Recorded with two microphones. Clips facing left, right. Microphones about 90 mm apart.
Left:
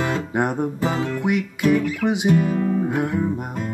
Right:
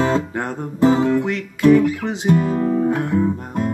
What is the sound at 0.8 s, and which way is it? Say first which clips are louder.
Music: right 12 dB; 25° right (ahead or behind).